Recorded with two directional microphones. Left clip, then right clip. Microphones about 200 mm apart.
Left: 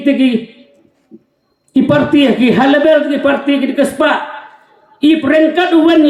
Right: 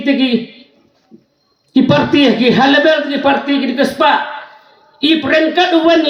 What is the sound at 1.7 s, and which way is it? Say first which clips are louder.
A woman's voice: left 1 dB; 40° left (ahead or behind).